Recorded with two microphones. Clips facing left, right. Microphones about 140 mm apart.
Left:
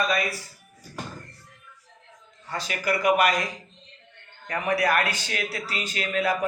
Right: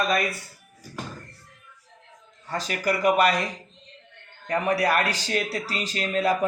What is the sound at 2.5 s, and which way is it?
Speech, 40° right (ahead or behind).